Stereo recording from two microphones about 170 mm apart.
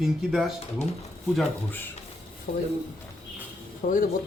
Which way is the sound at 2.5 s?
55° left (ahead or behind).